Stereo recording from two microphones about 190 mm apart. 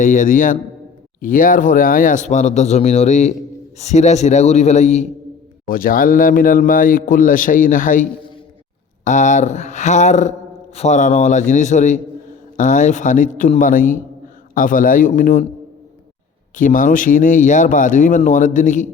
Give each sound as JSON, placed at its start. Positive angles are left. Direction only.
{"t": 0.0, "sound": "speech", "side_deg": 40}
{"t": 5.6, "sound": "speech", "side_deg": 50}
{"t": 9.0, "sound": "speech", "side_deg": 40}
{"t": 16.6, "sound": "speech", "side_deg": 45}